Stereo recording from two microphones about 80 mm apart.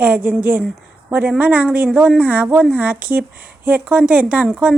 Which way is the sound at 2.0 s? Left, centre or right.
Centre.